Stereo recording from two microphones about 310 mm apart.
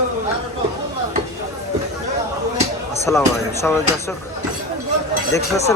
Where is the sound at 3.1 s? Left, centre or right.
Centre.